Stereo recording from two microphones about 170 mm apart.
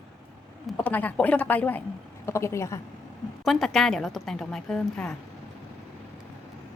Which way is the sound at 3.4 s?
Centre (ahead or behind).